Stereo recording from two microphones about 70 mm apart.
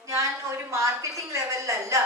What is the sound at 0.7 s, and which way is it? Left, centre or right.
A man's voice, right.